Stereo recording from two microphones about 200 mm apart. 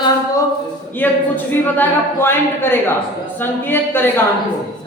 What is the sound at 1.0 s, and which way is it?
Speech, 10° left (ahead or behind).